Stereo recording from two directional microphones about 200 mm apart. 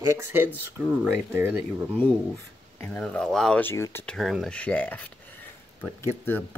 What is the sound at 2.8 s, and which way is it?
Speech, 10° left (ahead or behind).